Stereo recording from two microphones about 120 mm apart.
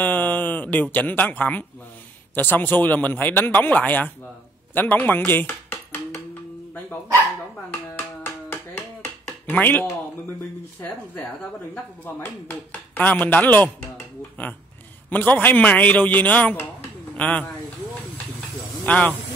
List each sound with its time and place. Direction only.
0.0 s a man's voice: 15° left (ahead or behind)
4.7 s dishes: 15° left (ahead or behind)
8.2 s a sound: 15° left (ahead or behind)
12.4 s a man's voice: 15° left (ahead or behind)
18.9 s a man's voice: 10° left (ahead or behind)